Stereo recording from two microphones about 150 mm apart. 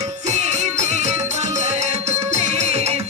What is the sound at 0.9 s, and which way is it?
Music, 50° right (ahead or behind).